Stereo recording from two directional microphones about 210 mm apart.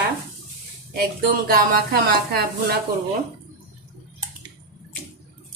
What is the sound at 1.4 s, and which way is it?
Speech, 45° right (ahead or behind).